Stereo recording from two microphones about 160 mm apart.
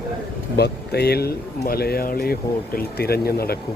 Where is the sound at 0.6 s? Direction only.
90° left.